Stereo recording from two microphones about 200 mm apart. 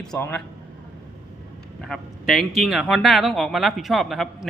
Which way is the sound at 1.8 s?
Centre (ahead or behind).